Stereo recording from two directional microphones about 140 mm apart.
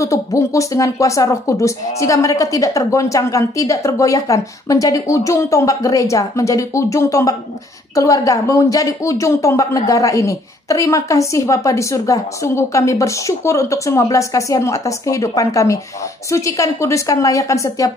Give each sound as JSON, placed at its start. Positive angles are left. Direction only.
{"t": 0.0, "sound": "speech", "side_deg": 20}